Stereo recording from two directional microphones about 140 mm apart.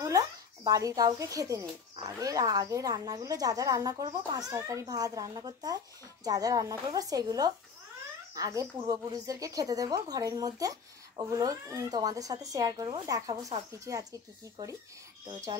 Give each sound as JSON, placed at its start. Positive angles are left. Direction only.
{"t": 0.7, "sound": "speech", "side_deg": -25}